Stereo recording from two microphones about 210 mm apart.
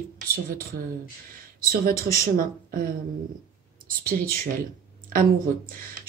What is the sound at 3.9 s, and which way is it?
Speech, 45° right (ahead or behind).